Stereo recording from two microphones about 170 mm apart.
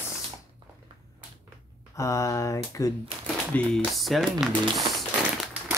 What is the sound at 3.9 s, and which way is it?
Speech, centre (ahead or behind).